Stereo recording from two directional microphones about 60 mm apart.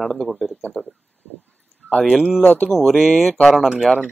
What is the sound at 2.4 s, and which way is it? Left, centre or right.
Speech, left.